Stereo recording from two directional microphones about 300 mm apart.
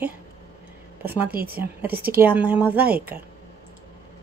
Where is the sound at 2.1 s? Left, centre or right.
Centre.